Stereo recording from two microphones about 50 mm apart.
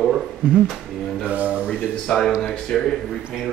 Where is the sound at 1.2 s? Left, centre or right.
Right.